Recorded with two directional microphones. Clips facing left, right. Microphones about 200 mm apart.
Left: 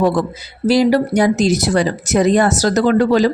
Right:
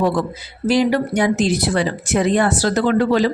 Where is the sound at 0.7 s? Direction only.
35° left (ahead or behind).